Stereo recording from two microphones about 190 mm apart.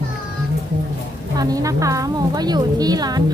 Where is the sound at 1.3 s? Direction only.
20° right (ahead or behind).